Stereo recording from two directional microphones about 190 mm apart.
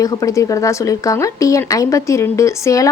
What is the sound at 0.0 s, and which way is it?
Speech, 15° left (ahead or behind).